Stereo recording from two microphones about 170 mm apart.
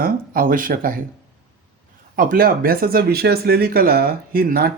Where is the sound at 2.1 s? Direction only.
55° right (ahead or behind).